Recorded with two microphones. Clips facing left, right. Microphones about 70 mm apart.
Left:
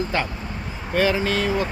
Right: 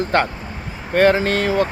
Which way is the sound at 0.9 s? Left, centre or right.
Right.